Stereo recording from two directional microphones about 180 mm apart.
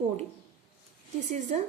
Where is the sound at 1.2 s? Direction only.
40° right (ahead or behind).